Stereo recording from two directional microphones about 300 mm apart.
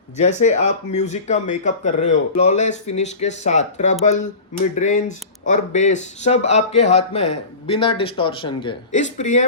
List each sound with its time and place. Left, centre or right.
0.2 s speech: left